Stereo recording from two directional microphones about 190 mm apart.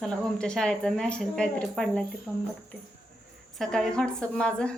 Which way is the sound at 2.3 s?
10° right (ahead or behind).